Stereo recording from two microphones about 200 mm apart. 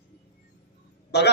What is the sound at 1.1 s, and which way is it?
Speech, 55° left (ahead or behind).